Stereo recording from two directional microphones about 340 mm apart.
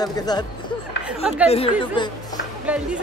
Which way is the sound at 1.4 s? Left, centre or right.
Centre.